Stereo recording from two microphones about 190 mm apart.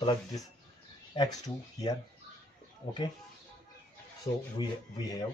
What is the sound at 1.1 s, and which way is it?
Speech, 20° left (ahead or behind).